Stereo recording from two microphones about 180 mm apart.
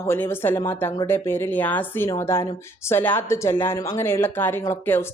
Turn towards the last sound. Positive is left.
turn(degrees=15)  # may be behind; listen again after turning